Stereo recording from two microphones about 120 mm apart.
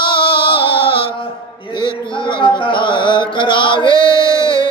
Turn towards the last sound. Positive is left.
turn(degrees=45)  # may be behind; listen again after turning